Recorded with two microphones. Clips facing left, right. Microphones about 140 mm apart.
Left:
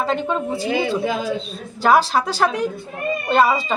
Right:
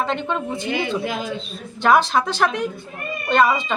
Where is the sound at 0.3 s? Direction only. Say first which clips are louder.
Left 2 dB; 5° left (ahead or behind).